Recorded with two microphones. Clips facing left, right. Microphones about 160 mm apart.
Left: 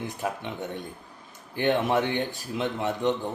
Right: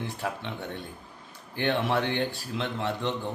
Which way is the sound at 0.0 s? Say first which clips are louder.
Left 2 dB; 15° left (ahead or behind).